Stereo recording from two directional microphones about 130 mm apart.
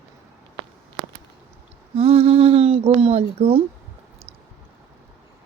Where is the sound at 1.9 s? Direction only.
50° right (ahead or behind).